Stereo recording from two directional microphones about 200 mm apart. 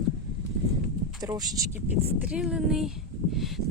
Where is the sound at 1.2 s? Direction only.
20° right (ahead or behind).